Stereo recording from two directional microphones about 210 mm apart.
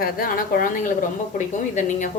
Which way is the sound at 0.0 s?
45° left (ahead or behind).